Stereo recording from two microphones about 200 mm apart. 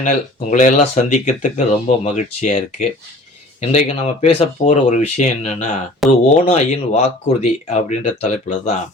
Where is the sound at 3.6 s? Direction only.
35° left (ahead or behind).